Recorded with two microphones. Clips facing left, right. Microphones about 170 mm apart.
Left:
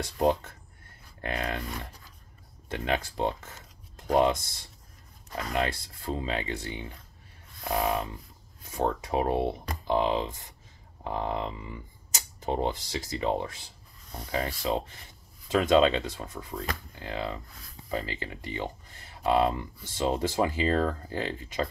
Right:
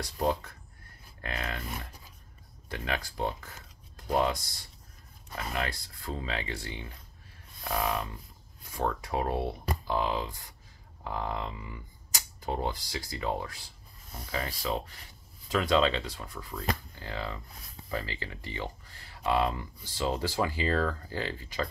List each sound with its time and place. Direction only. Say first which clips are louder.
0.0 s speech: left 4 dB; 25° left (ahead or behind)
2.7 s speech: left 5 dB; 25° left (ahead or behind)